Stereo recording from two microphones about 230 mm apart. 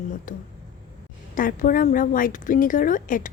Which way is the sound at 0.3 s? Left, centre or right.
Left.